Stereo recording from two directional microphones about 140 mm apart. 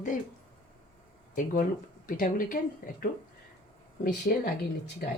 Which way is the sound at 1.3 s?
75° left (ahead or behind).